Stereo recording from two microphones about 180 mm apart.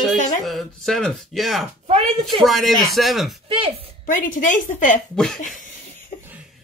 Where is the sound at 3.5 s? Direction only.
30° right (ahead or behind).